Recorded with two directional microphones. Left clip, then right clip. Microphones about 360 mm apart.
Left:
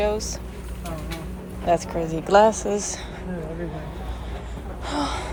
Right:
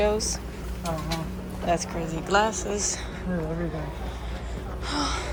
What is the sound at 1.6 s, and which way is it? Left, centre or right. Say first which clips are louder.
A woman's voice: left 5 dB; centre.